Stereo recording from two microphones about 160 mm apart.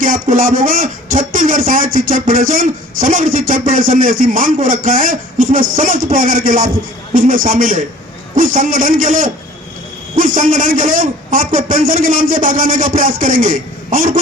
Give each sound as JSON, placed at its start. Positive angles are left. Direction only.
{"t": 0.0, "sound": "speech", "side_deg": -60}